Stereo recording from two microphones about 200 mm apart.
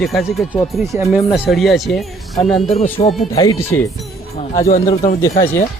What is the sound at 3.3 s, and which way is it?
Speech, 20° left (ahead or behind).